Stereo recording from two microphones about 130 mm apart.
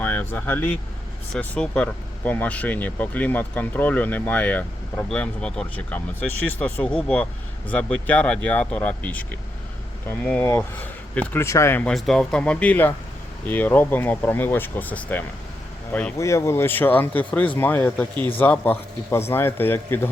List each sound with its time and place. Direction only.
0.0 s speech: 15° left (ahead or behind)
11.4 s speech: 20° left (ahead or behind)
11.9 s speech: 5° left (ahead or behind)
16.1 s speech: 25° left (ahead or behind)